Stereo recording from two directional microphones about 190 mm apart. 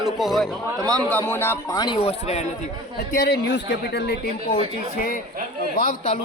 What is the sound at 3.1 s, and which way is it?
A man's voice, 55° left (ahead or behind).